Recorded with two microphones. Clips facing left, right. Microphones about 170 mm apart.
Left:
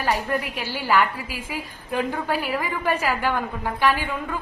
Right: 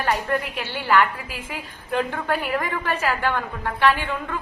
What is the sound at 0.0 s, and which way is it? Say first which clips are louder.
A woman's voice: right 1 dB; 10° left (ahead or behind).